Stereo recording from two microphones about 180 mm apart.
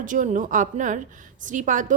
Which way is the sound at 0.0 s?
45° right (ahead or behind).